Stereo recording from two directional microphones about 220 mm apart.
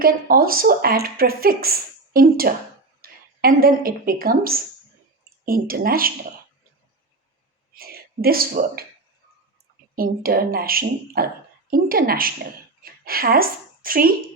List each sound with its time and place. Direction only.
0.0 s speech: 40° right (ahead or behind)
7.8 s speech: 40° right (ahead or behind)
9.9 s a woman's voice: 40° right (ahead or behind)